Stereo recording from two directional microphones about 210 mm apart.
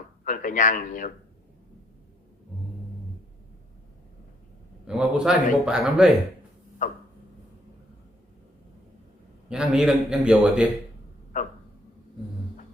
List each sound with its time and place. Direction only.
0.3 s a man's voice: 40° left (ahead or behind)
4.9 s a man's voice: 5° right (ahead or behind)
6.8 s a man's voice: 35° left (ahead or behind)
9.5 s a man's voice: 5° right (ahead or behind)